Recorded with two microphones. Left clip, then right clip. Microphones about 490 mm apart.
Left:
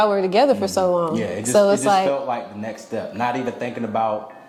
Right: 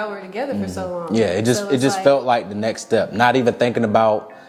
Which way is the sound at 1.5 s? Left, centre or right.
Left.